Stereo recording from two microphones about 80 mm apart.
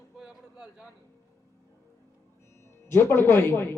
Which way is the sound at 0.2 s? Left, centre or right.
Centre.